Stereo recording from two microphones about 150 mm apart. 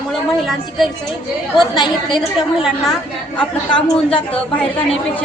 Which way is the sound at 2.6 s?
5° right (ahead or behind).